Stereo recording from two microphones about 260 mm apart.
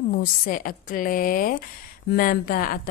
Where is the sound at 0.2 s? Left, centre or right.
Left.